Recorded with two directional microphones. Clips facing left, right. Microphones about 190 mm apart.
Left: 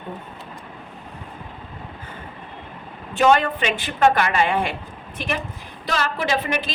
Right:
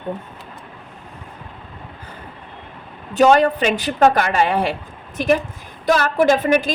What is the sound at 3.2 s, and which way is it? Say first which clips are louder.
A woman's voice: right 4 dB; 40° right (ahead or behind).